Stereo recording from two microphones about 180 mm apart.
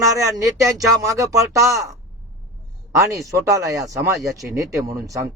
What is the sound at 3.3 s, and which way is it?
Speech, 20° right (ahead or behind).